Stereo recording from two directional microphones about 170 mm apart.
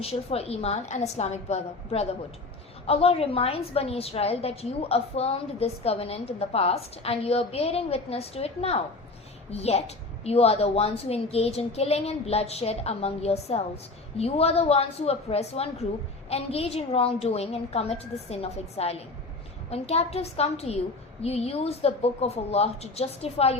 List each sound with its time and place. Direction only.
0.0 s a woman's voice: 35° left (ahead or behind)